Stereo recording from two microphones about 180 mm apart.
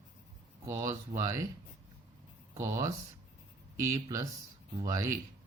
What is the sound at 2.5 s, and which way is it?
Speech, 15° right (ahead or behind).